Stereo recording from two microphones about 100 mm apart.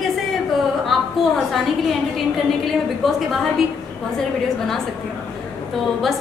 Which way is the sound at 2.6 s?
Centre (ahead or behind).